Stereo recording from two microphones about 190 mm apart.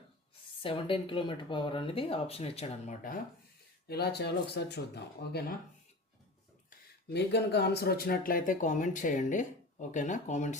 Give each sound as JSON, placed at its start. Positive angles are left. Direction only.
{"t": 0.6, "sound": "speech", "side_deg": 25}
{"t": 3.8, "sound": "speech", "side_deg": 55}
{"t": 6.7, "sound": "speech", "side_deg": 60}